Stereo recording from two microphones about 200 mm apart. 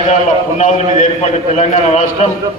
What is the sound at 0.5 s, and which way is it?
A man's voice, 40° left (ahead or behind).